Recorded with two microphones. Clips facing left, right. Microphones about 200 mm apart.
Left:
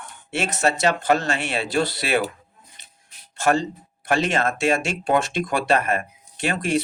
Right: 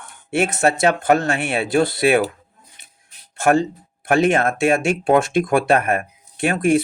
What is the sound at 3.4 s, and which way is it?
Speech, 55° right (ahead or behind).